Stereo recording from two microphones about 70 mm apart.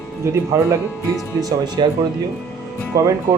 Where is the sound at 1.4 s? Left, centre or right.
Right.